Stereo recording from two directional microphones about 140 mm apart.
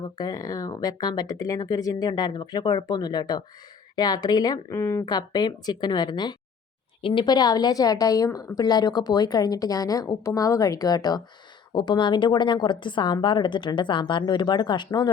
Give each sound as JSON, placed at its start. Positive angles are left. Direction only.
{"t": 0.2, "sound": "a woman's voice", "side_deg": 25}